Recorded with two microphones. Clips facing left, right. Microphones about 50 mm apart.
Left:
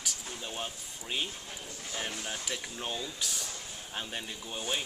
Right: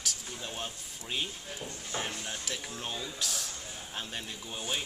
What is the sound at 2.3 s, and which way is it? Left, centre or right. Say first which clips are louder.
Speech: left 1 dB; centre.